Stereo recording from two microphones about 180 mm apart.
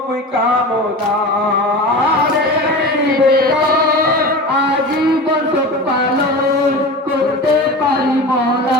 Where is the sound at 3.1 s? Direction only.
55° right (ahead or behind).